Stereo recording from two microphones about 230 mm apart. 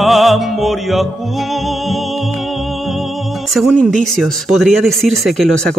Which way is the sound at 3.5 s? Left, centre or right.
Centre.